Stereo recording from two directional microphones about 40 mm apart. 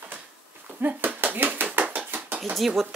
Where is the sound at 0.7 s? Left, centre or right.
Right.